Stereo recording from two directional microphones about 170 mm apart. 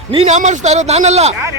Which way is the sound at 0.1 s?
40° right (ahead or behind).